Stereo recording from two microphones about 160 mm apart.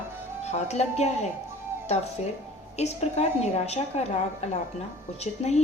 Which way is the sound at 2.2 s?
45° left (ahead or behind).